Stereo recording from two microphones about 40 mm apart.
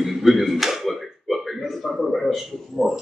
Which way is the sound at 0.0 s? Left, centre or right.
Centre.